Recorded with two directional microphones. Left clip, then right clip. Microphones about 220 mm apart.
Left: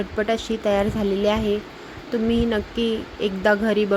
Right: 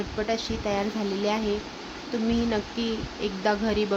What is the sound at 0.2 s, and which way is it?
A woman's voice, 15° left (ahead or behind).